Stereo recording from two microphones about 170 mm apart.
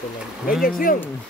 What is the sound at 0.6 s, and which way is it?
Speech, 55° left (ahead or behind).